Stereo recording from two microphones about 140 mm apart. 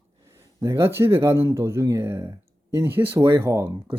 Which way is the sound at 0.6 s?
20° right (ahead or behind).